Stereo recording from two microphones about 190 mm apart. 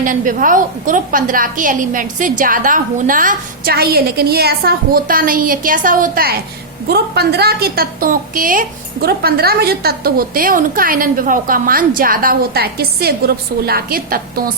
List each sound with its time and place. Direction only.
0.0 s a woman's voice: 45° right (ahead or behind)
6.8 s a woman's voice: 60° right (ahead or behind)